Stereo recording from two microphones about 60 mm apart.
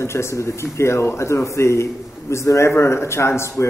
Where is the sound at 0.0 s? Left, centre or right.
Left.